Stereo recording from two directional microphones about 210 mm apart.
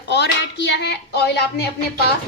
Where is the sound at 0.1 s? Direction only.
55° left (ahead or behind).